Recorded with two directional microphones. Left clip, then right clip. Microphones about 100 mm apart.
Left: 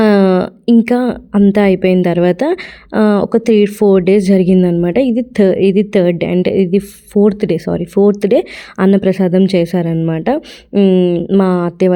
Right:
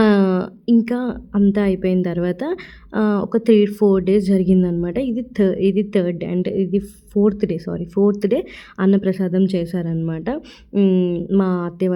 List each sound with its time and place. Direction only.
0.0 s a sound: 35° left (ahead or behind)
1.5 s a woman's voice: 40° left (ahead or behind)
10.8 s speech: 15° left (ahead or behind)
11.3 s a woman's voice: 35° left (ahead or behind)